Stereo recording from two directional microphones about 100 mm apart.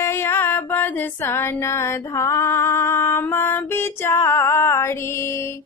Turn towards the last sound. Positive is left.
turn(degrees=25)  # may be behind; listen again after turning